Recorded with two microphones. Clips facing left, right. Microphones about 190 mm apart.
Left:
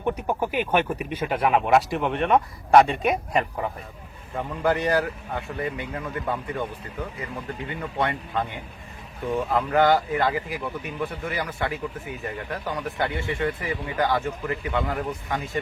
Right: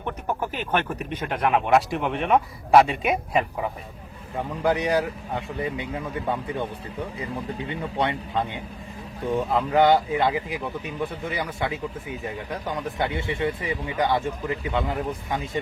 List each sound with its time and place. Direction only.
0.0 s speech: 10° left (ahead or behind)
4.4 s speech: 15° right (ahead or behind)
7.8 s speech: 15° right (ahead or behind)